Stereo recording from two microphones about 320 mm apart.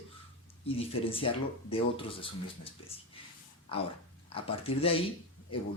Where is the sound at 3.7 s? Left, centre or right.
Centre.